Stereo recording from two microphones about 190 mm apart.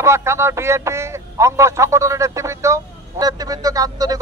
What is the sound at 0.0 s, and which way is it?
A man's voice, 15° right (ahead or behind).